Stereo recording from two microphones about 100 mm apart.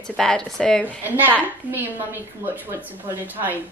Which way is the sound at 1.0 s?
20° right (ahead or behind).